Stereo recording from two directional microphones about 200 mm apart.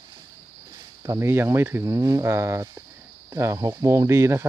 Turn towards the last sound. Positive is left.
turn(degrees=-15)  # may be behind; listen again after turning